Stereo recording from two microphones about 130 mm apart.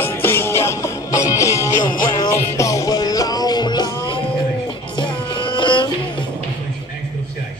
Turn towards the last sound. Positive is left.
turn(degrees=40)  # may be behind; listen again after turning